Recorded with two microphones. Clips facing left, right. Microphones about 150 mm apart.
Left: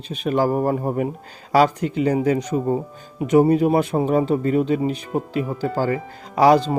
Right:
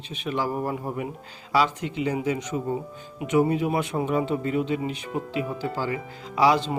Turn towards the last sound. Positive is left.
turn(degrees=40)  # may be behind; listen again after turning